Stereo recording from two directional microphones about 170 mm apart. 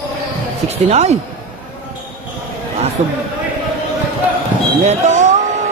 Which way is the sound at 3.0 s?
40° right (ahead or behind).